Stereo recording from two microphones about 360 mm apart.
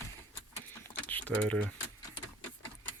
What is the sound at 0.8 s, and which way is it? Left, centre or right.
Keys jangling, centre.